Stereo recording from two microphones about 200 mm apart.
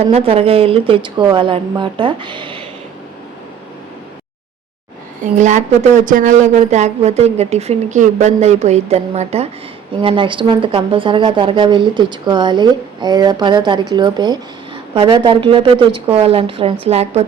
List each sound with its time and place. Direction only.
0.1 s a woman's voice: 30° right (ahead or behind)
5.2 s a woman's voice: 35° right (ahead or behind)